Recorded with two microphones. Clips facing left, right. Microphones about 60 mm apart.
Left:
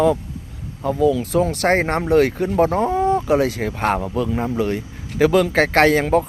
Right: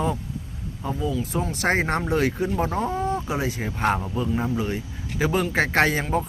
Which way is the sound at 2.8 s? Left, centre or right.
Left.